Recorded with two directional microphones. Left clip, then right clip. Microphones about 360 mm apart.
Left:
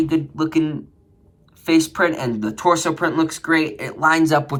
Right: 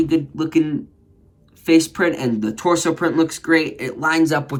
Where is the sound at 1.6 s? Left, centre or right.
Centre.